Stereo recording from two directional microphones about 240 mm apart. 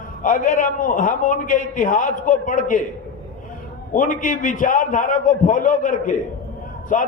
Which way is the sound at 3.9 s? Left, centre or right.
Left.